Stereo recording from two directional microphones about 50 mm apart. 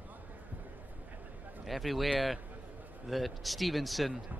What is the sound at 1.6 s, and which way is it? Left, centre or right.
A man's voice, centre.